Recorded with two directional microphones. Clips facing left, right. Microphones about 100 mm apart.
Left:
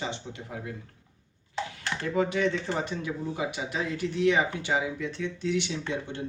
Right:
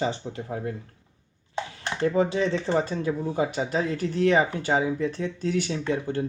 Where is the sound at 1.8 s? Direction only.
30° right (ahead or behind).